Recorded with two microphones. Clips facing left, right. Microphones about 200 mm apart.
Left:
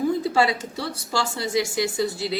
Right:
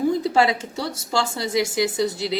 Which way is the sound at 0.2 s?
20° right (ahead or behind).